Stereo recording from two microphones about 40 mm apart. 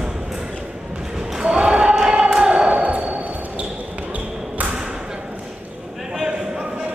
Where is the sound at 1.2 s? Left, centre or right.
Centre.